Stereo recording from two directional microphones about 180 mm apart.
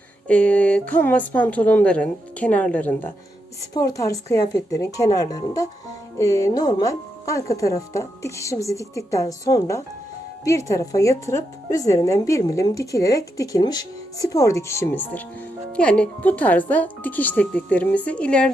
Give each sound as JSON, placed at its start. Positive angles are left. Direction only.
{"t": 0.3, "sound": "a woman's voice", "side_deg": 5}